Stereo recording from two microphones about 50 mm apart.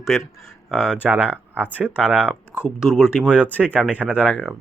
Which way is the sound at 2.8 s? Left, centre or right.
Centre.